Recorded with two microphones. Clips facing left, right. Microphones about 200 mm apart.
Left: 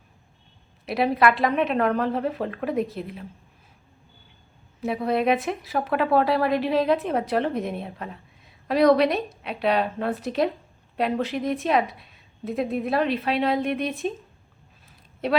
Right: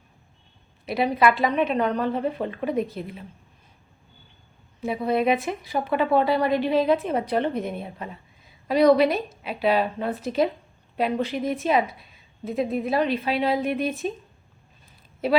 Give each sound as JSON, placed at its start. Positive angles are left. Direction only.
{"t": 0.9, "sound": "a woman's voice", "side_deg": 0}
{"t": 4.8, "sound": "a woman's voice", "side_deg": 0}
{"t": 14.8, "sound": "a sound", "side_deg": 0}